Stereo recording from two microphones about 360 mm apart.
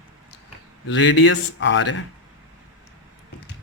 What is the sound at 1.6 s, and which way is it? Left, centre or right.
Speech, left.